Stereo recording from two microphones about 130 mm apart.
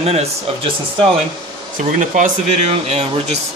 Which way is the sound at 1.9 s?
75° right (ahead or behind).